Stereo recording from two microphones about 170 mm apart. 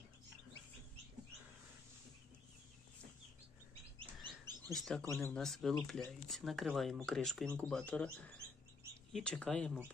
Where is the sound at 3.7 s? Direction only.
30° right (ahead or behind).